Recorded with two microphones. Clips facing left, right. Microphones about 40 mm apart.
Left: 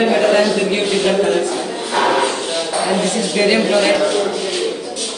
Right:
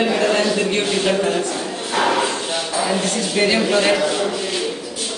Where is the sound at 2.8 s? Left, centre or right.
Centre.